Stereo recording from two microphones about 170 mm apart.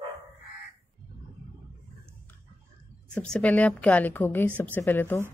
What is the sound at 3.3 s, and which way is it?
A woman's voice, 10° left (ahead or behind).